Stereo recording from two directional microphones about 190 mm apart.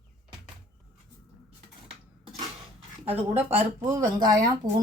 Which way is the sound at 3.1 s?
35° right (ahead or behind).